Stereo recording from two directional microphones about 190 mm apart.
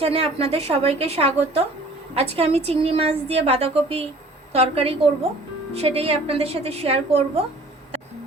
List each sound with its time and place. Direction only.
0.0 s a woman's voice: 30° right (ahead or behind)